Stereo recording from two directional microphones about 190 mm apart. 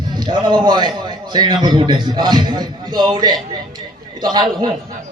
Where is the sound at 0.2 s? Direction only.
25° right (ahead or behind).